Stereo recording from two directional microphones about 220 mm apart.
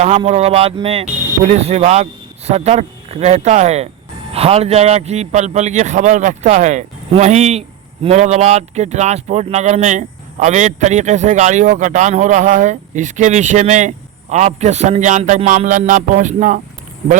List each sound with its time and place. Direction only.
0.0 s speech: 30° right (ahead or behind)